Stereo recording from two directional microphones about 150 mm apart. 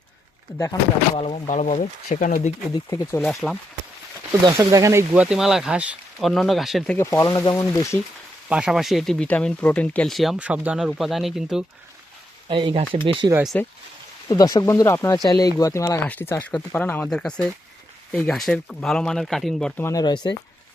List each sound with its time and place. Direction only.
1.1 s speech: 35° left (ahead or behind)
1.5 s speech: 50° left (ahead or behind)
2.7 s speech: 20° left (ahead or behind)
3.2 s speech: 5° left (ahead or behind)
4.4 s speech: 20° right (ahead or behind)
5.1 s speech: 5° right (ahead or behind)
6.9 s speech: 20° left (ahead or behind)
8.4 s speech: 5° right (ahead or behind)
12.5 s speech: 35° right (ahead or behind)
13.5 s speech: 10° left (ahead or behind)
14.3 s speech: 25° left (ahead or behind); by 19.8 s 5° left (ahead or behind)
19.8 s speech: 25° left (ahead or behind)